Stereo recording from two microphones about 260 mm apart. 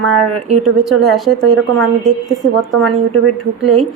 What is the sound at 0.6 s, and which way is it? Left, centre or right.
A woman's voice, centre.